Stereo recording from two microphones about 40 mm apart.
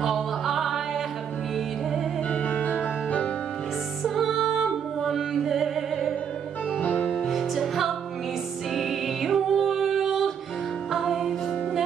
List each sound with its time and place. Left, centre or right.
0.0 s music: centre
2.3 s music: left
4.0 s music: centre
6.8 s music: left
7.2 s music: centre